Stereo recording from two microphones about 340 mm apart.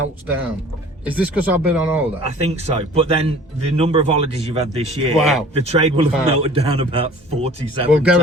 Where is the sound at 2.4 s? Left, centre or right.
Centre.